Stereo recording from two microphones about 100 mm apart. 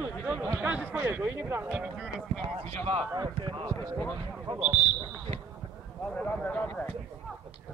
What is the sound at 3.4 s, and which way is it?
Speech, 55° right (ahead or behind).